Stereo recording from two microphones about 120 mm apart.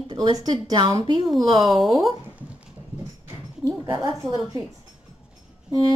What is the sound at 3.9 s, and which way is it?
Speech, 30° right (ahead or behind).